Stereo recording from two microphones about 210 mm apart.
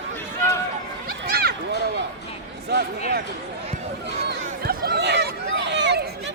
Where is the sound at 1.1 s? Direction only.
50° right (ahead or behind).